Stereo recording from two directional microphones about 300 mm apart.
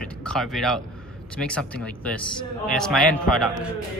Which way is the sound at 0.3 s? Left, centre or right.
Centre.